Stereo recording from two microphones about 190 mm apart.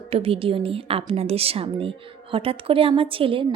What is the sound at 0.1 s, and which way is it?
Speech, 30° right (ahead or behind).